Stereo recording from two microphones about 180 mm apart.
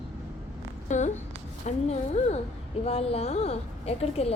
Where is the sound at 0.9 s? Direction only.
40° left (ahead or behind).